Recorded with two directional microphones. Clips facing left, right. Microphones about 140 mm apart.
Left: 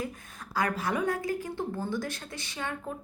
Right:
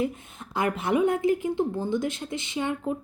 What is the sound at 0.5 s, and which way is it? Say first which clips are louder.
A woman's voice: right 5 dB; 25° right (ahead or behind).